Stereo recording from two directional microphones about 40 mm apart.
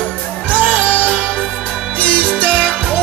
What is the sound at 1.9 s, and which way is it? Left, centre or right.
Music, left.